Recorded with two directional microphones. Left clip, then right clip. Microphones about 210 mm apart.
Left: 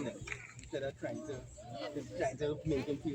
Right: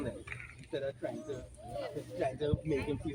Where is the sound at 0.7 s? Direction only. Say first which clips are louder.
Right 2 dB; 10° left (ahead or behind).